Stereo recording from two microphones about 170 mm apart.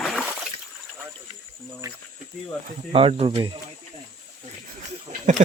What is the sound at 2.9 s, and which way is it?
Speech, 35° right (ahead or behind).